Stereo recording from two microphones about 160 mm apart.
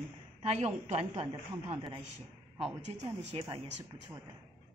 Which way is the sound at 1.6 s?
30° right (ahead or behind).